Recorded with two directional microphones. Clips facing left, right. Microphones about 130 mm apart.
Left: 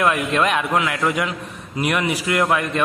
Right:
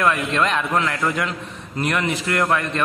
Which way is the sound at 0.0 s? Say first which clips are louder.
Left 1 dB; 15° left (ahead or behind).